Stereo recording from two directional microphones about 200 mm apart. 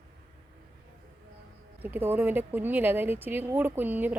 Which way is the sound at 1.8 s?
10° right (ahead or behind).